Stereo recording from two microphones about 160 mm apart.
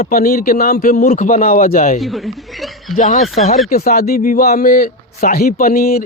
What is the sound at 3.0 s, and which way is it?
Speech, 50° left (ahead or behind).